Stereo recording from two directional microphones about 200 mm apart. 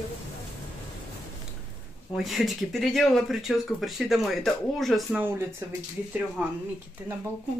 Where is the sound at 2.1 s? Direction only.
Centre (ahead or behind).